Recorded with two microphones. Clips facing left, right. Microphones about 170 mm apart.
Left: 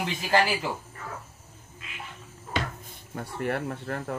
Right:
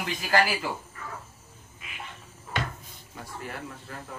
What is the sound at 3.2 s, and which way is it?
Speech, 60° left (ahead or behind).